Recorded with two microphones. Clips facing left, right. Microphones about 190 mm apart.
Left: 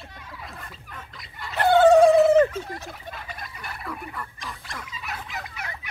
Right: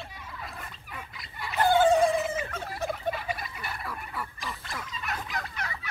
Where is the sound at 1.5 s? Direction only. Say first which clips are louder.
Left 6 dB; 70° left (ahead or behind).